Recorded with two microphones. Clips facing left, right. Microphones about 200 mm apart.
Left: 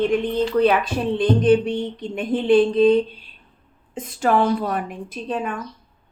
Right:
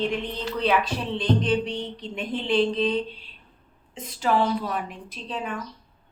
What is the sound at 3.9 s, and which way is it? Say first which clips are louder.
Speech: left 4 dB; 50° left (ahead or behind).